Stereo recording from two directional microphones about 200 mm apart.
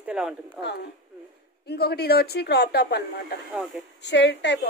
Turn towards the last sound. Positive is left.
turn(degrees=60)  # may be behind; listen again after turning